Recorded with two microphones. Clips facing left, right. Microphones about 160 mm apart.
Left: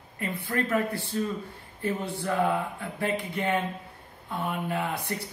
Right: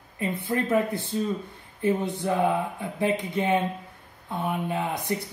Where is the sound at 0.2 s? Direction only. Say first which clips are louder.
Right 3 dB; 20° right (ahead or behind).